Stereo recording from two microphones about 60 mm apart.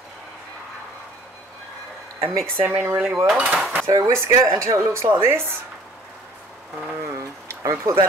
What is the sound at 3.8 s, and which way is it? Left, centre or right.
Speech, right.